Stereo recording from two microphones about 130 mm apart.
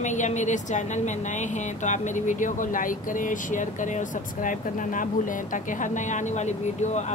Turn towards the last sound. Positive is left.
turn(degrees=65)  # may be behind; listen again after turning